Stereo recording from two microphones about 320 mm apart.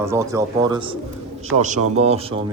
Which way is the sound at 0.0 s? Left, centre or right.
Centre.